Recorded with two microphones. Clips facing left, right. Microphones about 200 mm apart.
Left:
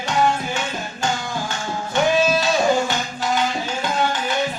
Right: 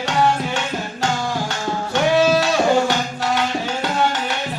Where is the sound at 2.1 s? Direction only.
75° right (ahead or behind).